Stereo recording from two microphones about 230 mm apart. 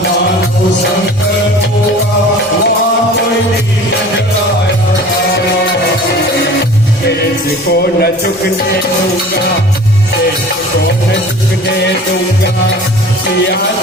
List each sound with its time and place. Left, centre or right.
7.7 s a man's voice: left